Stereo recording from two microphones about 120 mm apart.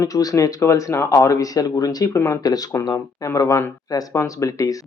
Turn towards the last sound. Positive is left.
turn(degrees=30)  # may be behind; listen again after turning